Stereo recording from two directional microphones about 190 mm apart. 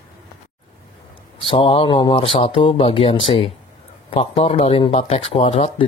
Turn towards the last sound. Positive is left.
turn(degrees=30)  # may be behind; listen again after turning